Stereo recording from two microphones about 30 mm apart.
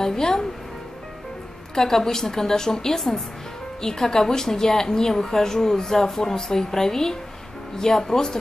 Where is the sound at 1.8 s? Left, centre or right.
Centre.